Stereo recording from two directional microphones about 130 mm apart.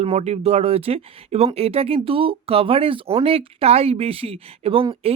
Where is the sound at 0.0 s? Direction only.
55° right (ahead or behind).